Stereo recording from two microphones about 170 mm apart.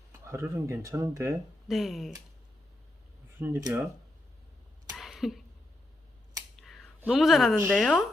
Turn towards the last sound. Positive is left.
turn(degrees=5)  # may be behind; listen again after turning